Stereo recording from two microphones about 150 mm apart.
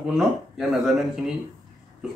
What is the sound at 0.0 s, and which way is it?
Speech, 5° right (ahead or behind).